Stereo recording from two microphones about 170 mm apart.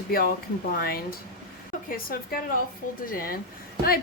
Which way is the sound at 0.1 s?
60° left (ahead or behind).